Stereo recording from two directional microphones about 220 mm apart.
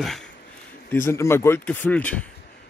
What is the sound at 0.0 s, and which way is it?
A man's voice, centre (ahead or behind).